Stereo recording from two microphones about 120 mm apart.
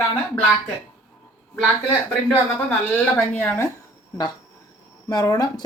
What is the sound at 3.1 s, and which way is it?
Speech, 20° left (ahead or behind).